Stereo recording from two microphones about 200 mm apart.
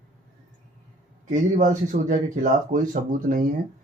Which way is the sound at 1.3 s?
40° right (ahead or behind).